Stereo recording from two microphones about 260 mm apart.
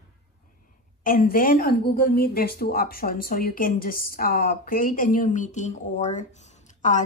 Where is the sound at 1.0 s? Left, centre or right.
Left.